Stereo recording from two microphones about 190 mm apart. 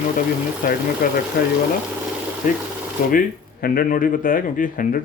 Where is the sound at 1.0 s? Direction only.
45° left (ahead or behind).